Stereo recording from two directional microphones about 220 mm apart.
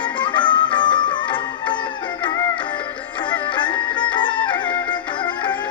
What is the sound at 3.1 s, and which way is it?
Music, 20° left (ahead or behind).